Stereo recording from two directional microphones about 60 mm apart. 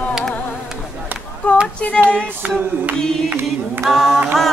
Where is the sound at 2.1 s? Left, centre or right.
Right.